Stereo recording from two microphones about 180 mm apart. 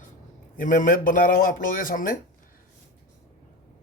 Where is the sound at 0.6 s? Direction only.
45° left (ahead or behind).